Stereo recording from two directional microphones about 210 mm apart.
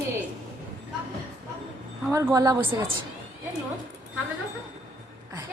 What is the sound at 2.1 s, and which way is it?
Speech, 15° right (ahead or behind).